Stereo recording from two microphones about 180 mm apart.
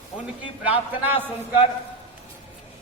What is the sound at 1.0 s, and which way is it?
Speech, 10° right (ahead or behind).